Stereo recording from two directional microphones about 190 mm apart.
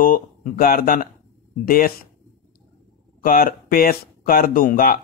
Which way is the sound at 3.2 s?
50° left (ahead or behind).